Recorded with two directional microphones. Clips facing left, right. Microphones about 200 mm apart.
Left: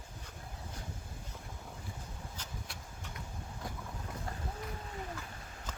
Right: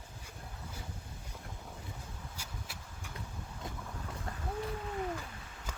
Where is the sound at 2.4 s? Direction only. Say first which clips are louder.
Left 1 dB; 5° right (ahead or behind).